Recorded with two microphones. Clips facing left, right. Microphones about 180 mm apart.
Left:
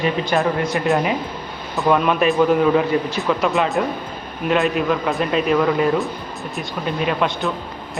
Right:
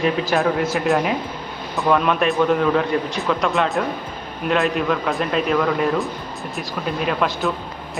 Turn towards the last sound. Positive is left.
turn(degrees=0)  # may be behind; listen again after turning